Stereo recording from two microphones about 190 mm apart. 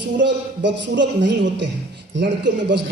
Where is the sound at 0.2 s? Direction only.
70° right (ahead or behind).